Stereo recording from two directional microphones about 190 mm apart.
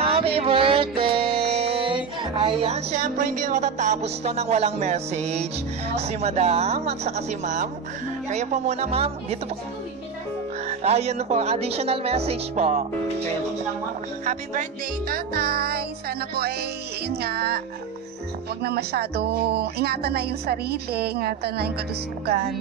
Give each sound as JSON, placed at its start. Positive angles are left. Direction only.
{"t": 0.1, "sound": "a sound", "side_deg": -30}
{"t": 1.1, "sound": "music", "side_deg": -30}
{"t": 5.9, "sound": "speech", "side_deg": -35}
{"t": 10.7, "sound": "speech", "side_deg": -35}
{"t": 14.2, "sound": "music", "side_deg": -40}
{"t": 17.1, "sound": "speech", "side_deg": -55}
{"t": 18.6, "sound": "speech", "side_deg": -60}